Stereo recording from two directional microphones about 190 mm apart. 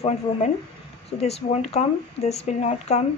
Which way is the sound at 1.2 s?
35° left (ahead or behind).